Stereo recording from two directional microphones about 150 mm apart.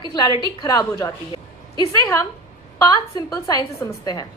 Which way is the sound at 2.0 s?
20° left (ahead or behind).